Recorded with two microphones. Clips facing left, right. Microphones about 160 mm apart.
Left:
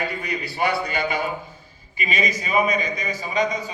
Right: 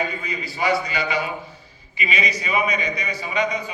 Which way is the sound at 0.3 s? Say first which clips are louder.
Even; 65° left (ahead or behind).